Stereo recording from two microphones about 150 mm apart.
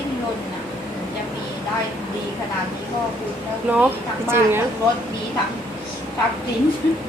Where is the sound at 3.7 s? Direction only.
15° right (ahead or behind).